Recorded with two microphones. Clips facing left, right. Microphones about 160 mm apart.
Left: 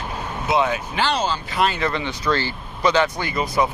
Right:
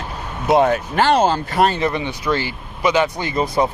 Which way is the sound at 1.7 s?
20° right (ahead or behind).